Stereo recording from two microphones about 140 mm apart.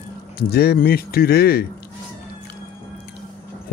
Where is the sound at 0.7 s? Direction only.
90° left.